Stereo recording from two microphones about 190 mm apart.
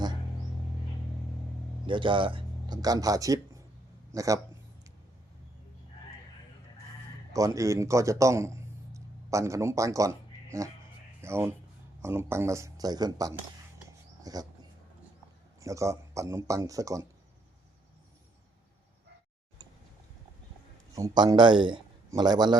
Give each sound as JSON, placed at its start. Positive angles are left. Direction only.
{"t": 1.9, "sound": "speech", "side_deg": -25}
{"t": 7.3, "sound": "a man's voice", "side_deg": -15}
{"t": 14.3, "sound": "dog", "side_deg": -20}
{"t": 15.6, "sound": "speech", "side_deg": -15}
{"t": 20.9, "sound": "a man's voice", "side_deg": -20}